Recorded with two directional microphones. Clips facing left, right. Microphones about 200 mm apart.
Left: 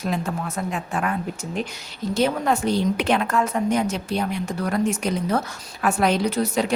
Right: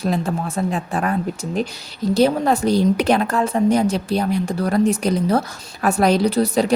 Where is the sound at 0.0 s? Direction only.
35° right (ahead or behind).